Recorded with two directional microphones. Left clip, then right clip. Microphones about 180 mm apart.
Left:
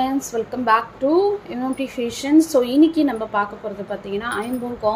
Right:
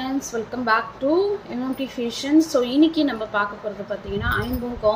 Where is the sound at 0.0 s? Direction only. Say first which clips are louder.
Left 5 dB; 20° left (ahead or behind).